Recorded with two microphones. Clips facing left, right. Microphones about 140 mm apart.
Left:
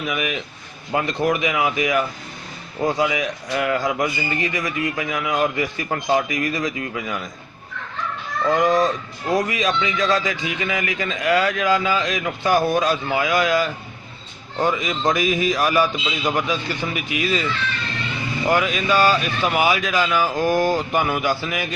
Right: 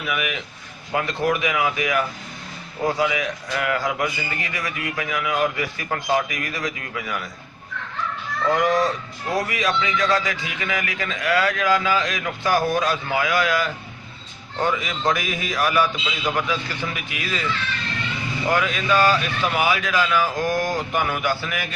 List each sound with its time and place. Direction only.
0.1 s a man's voice: 30° left (ahead or behind)
8.5 s a man's voice: 20° left (ahead or behind)
14.6 s a man's voice: 20° left (ahead or behind)
18.5 s speech: 15° left (ahead or behind)